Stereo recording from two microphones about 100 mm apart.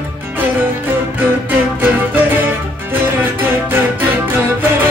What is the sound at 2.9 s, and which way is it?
Music, 20° right (ahead or behind).